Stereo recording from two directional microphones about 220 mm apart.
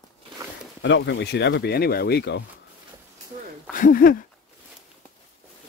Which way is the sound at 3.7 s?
40° left (ahead or behind).